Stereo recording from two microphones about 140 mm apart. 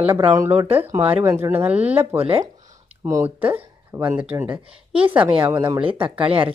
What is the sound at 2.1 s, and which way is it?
Speech, 40° right (ahead or behind).